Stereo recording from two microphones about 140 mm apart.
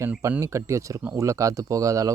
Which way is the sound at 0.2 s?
20° right (ahead or behind).